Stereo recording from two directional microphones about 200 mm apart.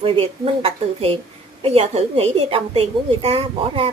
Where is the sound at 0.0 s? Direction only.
25° right (ahead or behind).